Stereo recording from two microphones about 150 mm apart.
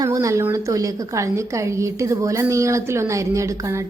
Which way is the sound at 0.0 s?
20° right (ahead or behind).